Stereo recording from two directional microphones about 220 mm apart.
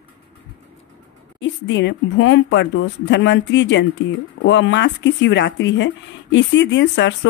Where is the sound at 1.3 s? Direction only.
55° left (ahead or behind).